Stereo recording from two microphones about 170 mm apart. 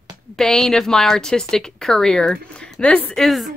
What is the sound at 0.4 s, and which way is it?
A woman's voice, 5° left (ahead or behind).